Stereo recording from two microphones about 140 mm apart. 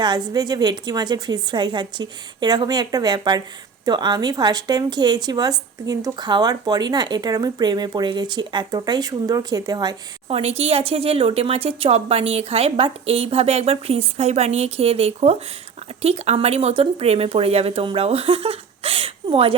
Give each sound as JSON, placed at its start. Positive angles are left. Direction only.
{"t": 0.0, "sound": "a woman's voice", "side_deg": -30}
{"t": 10.2, "sound": "a woman's voice", "side_deg": -45}